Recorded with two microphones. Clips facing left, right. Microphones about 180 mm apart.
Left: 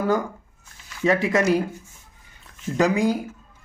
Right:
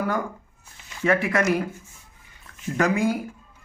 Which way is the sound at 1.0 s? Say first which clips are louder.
Left 2 dB; 20° left (ahead or behind).